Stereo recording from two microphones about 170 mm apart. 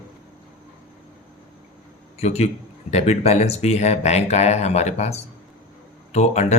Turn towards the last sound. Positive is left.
turn(degrees=40)  # may be behind; listen again after turning